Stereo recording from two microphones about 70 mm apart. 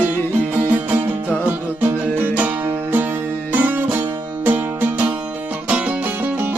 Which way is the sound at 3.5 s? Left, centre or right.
Right.